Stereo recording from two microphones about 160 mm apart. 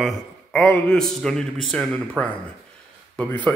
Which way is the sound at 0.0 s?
5° left (ahead or behind).